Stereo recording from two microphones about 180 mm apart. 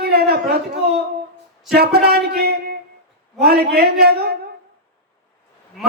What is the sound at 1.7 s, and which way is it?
A man's voice, 60° right (ahead or behind).